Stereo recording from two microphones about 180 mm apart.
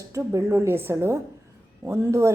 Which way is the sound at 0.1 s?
15° right (ahead or behind).